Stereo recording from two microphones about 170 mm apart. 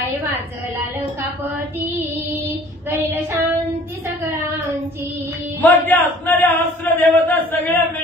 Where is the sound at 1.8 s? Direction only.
10° right (ahead or behind).